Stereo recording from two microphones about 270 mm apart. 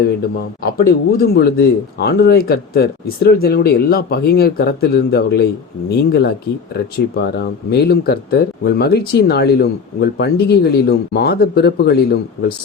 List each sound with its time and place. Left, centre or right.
1.1 s speech: left